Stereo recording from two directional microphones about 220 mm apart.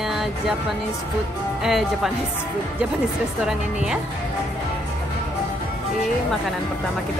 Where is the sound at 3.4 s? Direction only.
5° right (ahead or behind).